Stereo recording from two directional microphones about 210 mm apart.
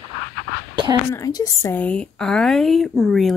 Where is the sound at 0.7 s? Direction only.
20° right (ahead or behind).